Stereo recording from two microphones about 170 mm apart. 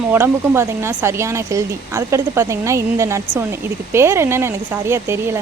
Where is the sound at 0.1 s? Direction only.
15° right (ahead or behind).